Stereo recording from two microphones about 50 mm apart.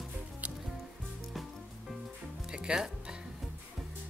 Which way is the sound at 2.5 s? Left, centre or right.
Centre.